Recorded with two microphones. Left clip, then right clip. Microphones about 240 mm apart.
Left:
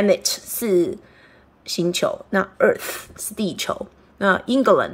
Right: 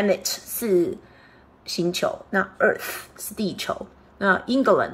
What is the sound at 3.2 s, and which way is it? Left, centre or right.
A woman's voice, centre.